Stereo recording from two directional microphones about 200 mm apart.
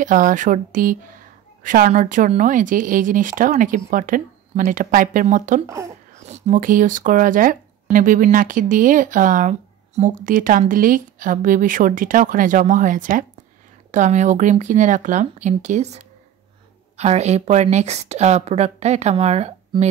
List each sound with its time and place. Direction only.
0.0 s speech: 40° right (ahead or behind)